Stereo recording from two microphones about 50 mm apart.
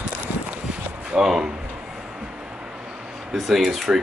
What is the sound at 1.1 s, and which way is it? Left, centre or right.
Speech, centre.